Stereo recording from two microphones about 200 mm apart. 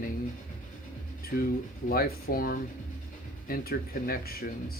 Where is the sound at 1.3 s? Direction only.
45° left (ahead or behind).